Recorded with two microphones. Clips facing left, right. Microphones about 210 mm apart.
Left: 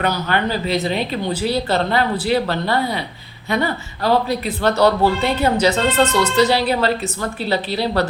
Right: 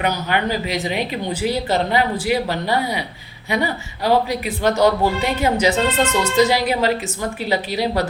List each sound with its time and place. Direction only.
0.0 s speech: 15° right (ahead or behind)